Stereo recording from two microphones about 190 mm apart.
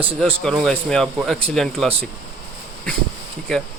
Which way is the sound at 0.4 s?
5° left (ahead or behind).